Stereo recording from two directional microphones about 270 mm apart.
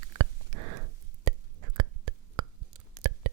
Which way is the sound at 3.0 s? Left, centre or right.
Right.